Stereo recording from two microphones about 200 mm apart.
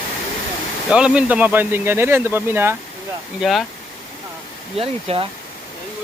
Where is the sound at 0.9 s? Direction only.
5° right (ahead or behind).